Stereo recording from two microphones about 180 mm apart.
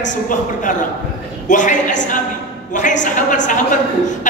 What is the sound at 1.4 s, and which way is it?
Speech, 45° left (ahead or behind).